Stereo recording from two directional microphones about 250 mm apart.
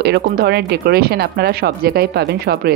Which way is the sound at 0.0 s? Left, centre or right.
Right.